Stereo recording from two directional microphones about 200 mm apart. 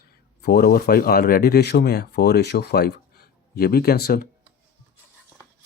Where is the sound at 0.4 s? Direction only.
50° left (ahead or behind).